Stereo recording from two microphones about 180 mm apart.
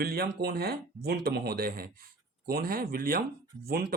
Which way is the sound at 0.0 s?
60° right (ahead or behind).